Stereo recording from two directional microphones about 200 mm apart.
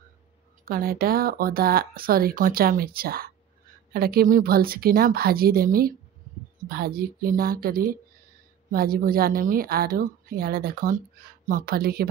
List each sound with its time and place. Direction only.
0.7 s speech: 45° right (ahead or behind)